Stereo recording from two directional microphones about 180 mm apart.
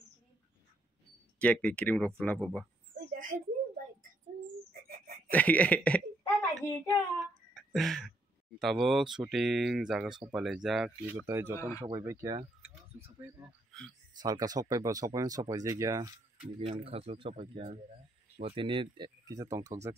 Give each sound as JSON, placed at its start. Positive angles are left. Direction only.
{"t": 1.4, "sound": "speech", "side_deg": 5}
{"t": 3.3, "sound": "speech", "side_deg": -15}
{"t": 4.8, "sound": "a sound", "side_deg": -55}
{"t": 5.3, "sound": "a woman's voice", "side_deg": 10}
{"t": 11.1, "sound": "speech", "side_deg": -15}
{"t": 13.7, "sound": "a sound", "side_deg": 0}
{"t": 14.1, "sound": "speech", "side_deg": -20}
{"t": 16.5, "sound": "speech", "side_deg": -30}